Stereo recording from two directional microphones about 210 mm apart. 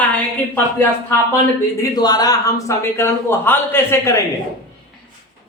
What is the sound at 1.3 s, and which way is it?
Speech, 15° left (ahead or behind).